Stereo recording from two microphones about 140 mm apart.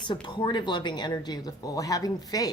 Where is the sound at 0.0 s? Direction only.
35° left (ahead or behind).